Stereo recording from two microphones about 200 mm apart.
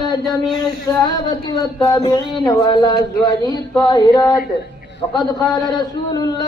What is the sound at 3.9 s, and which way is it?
A man's voice, 20° left (ahead or behind).